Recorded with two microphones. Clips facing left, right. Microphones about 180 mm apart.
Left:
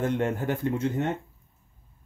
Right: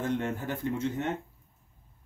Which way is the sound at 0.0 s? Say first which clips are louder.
Left 4 dB; 65° left (ahead or behind).